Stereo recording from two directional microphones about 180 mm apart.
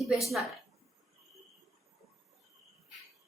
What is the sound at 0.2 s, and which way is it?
Speech, centre (ahead or behind).